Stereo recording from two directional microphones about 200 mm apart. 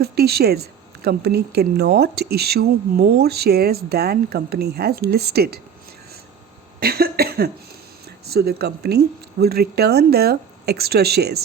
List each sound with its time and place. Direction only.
0.0 s speech: 50° right (ahead or behind)
6.7 s cough: 50° right (ahead or behind)
8.3 s speech: 50° right (ahead or behind)